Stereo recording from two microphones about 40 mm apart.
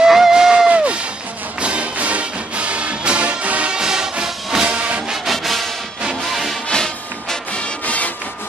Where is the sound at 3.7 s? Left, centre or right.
Centre.